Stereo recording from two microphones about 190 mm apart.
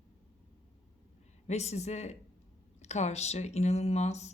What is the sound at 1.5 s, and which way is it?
Speech, 35° left (ahead or behind).